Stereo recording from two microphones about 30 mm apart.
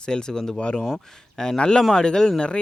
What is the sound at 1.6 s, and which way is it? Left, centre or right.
Speech, left.